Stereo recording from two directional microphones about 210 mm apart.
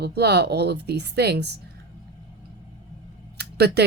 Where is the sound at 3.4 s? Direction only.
50° right (ahead or behind).